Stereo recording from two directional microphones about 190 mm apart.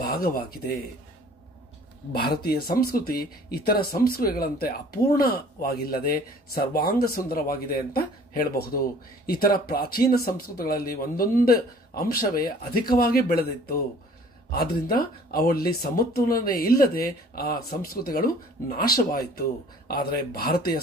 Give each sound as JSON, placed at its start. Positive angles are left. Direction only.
{"t": 0.0, "sound": "speech", "side_deg": 55}
{"t": 2.1, "sound": "speech", "side_deg": 55}